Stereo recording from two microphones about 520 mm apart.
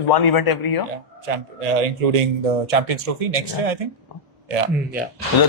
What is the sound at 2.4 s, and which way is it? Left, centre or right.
Speech, right.